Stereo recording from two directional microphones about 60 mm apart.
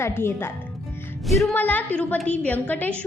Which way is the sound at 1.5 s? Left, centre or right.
Left.